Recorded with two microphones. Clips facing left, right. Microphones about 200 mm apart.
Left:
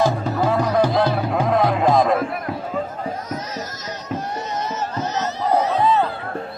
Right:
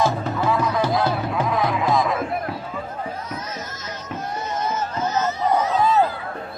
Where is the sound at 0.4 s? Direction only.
40° left (ahead or behind).